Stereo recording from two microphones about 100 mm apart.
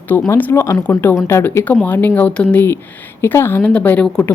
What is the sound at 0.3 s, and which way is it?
Speech, 20° left (ahead or behind).